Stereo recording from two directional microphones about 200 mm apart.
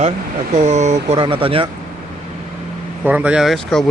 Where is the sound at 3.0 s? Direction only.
5° right (ahead or behind).